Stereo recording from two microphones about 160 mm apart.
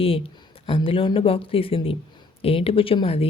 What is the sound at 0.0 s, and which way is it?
Speech, 35° left (ahead or behind).